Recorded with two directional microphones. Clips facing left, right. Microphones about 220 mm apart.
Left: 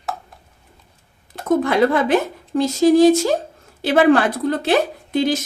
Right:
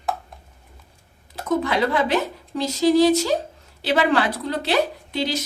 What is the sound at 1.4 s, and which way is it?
A woman's voice, 50° left (ahead or behind).